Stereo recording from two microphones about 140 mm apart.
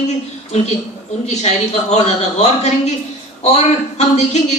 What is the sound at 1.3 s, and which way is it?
A man's voice, 50° left (ahead or behind).